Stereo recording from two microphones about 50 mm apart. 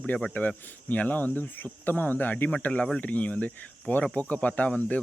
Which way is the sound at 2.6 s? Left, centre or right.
Left.